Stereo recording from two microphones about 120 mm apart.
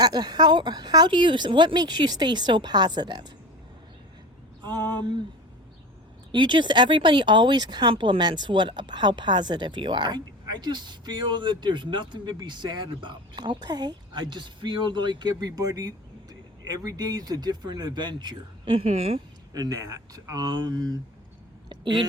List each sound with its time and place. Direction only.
0.0 s speech: 35° right (ahead or behind)
4.6 s speech: 35° right (ahead or behind)
6.3 s speech: 40° right (ahead or behind)
19.5 s speech: 30° right (ahead or behind)
21.7 s a sound: 40° right (ahead or behind)